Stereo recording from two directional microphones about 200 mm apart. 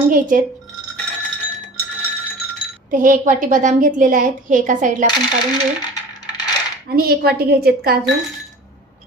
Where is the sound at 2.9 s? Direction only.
40° right (ahead or behind).